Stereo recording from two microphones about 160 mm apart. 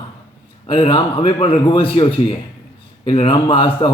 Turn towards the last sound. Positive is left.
turn(degrees=30)  # may be behind; listen again after turning